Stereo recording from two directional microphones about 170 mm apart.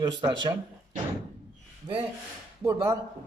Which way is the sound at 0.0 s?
25° right (ahead or behind).